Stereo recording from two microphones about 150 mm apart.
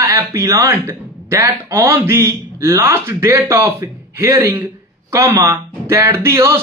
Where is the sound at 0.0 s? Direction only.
20° right (ahead or behind).